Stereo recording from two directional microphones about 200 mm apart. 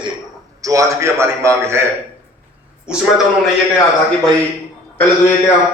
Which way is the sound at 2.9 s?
5° right (ahead or behind).